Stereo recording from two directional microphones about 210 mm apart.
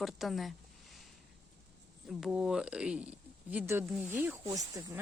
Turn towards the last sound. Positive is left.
turn(degrees=-15)  # may be behind; listen again after turning